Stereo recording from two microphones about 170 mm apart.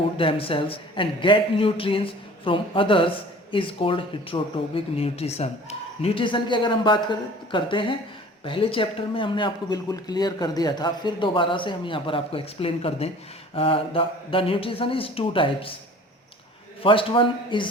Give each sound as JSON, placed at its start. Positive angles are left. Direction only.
{"t": 0.2, "sound": "speech", "side_deg": 30}
{"t": 16.8, "sound": "speech", "side_deg": 30}